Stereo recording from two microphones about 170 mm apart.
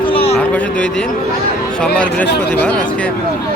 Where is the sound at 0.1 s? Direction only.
35° left (ahead or behind).